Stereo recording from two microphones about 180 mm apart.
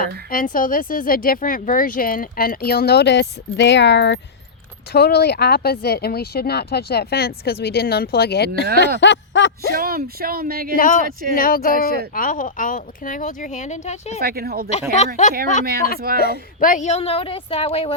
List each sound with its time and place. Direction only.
0.0 s speech: 50° left (ahead or behind); by 4.2 s 75° left (ahead or behind)
4.9 s speech: 60° left (ahead or behind)
9.0 s a sound: 85° left
9.7 s speech: 55° right (ahead or behind)
10.8 s speech: 45° left (ahead or behind)
11.0 s speech: 50° right (ahead or behind)
11.3 s speech: 55° left (ahead or behind)
14.2 s speech: 60° right (ahead or behind)
14.7 s a woman's voice: 35° left (ahead or behind)
16.0 s speech: 55° right (ahead or behind)
16.6 s a woman's voice: 45° left (ahead or behind)